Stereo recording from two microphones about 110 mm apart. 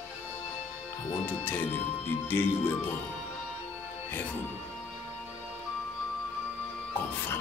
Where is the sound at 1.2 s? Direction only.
15° left (ahead or behind).